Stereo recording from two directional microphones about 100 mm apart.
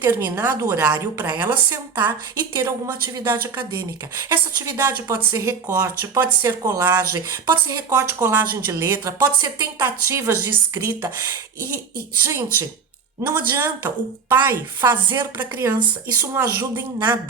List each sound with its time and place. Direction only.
0.0 s a woman's voice: 20° right (ahead or behind)